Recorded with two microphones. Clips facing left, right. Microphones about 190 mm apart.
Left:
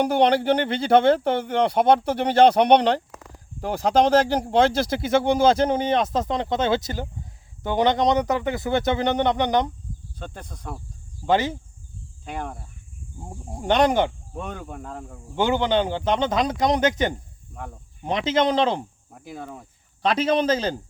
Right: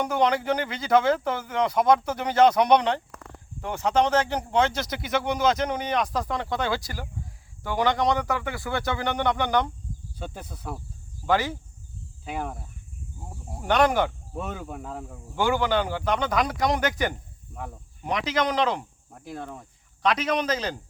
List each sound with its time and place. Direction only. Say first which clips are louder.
0.0 s speech: left 5 dB; 30° left (ahead or behind)
10.2 s speech: right 1 dB; 10° right (ahead or behind)
11.3 s speech: left 3 dB; 20° left (ahead or behind)
12.2 s speech: even; 5° right (ahead or behind)
13.6 s speech: left 2 dB; 20° left (ahead or behind)
14.3 s speech: even; 5° right (ahead or behind)
15.4 s speech: left 3 dB; 20° left (ahead or behind)
17.5 s speech: even; centre (ahead or behind)
18.0 s speech: left 4 dB; 25° left (ahead or behind)
19.1 s speech: even; centre (ahead or behind)
20.0 s speech: left 4 dB; 30° left (ahead or behind)